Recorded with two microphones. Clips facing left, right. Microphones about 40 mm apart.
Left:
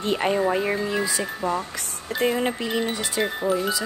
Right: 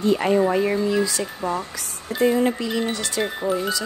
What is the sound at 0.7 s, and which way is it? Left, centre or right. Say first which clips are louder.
Speech: right 3 dB; centre.